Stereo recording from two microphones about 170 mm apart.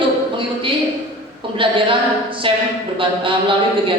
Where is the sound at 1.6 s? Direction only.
30° right (ahead or behind).